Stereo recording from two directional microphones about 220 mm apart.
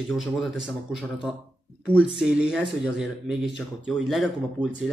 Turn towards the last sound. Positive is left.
turn(degrees=0)  # may be behind; listen again after turning